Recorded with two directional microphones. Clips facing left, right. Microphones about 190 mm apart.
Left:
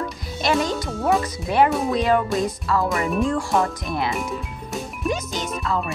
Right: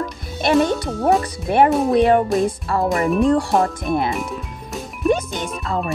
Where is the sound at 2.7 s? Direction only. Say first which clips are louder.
Right 2 dB; 30° right (ahead or behind).